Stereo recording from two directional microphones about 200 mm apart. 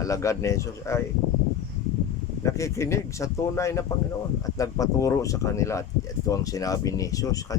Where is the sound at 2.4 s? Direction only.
15° left (ahead or behind).